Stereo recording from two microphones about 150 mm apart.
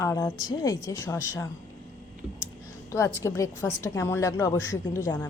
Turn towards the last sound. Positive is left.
turn(degrees=20)  # may be behind; listen again after turning